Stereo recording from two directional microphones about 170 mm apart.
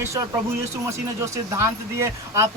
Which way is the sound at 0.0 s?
15° right (ahead or behind).